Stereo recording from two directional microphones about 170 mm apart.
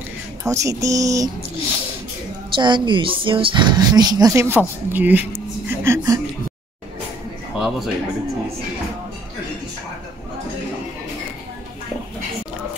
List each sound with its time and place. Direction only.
0.4 s speech: 20° right (ahead or behind)
2.5 s speech: 30° right (ahead or behind)
7.5 s music: 5° right (ahead or behind)